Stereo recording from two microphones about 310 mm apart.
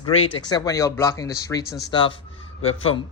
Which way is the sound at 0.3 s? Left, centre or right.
Centre.